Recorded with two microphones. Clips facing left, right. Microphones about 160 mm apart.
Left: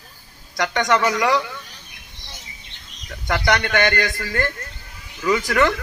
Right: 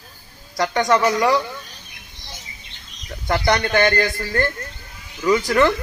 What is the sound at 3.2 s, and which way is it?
A man's voice, 30° right (ahead or behind).